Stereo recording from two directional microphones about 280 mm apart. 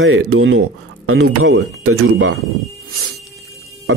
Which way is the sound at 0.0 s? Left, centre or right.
Right.